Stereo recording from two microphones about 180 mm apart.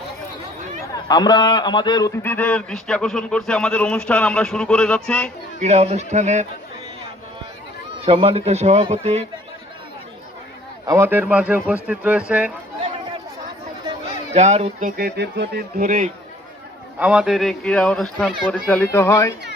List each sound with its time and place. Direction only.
1.0 s a man's voice: 25° left (ahead or behind)
2.2 s speech: 10° left (ahead or behind)
5.5 s a man's voice: 35° right (ahead or behind)
8.0 s a man's voice: 30° right (ahead or behind)
10.8 s speech: 15° right (ahead or behind)
14.3 s speech: 40° right (ahead or behind); by 15.6 s 65° right (ahead or behind)
15.8 s speech: 50° right (ahead or behind)
17.0 s speech: 5° right (ahead or behind); by 19.3 s 15° left (ahead or behind)